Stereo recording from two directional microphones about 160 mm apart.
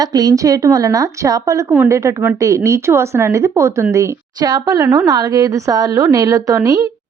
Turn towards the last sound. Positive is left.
turn(degrees=-20)  # may be behind; listen again after turning